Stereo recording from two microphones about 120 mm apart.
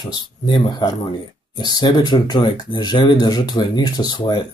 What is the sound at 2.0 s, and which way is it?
Speech, 35° left (ahead or behind).